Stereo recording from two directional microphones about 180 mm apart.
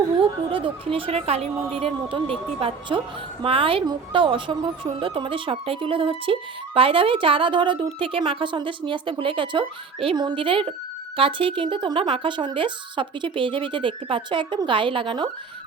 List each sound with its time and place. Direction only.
0.2 s a woman's voice: 30° right (ahead or behind)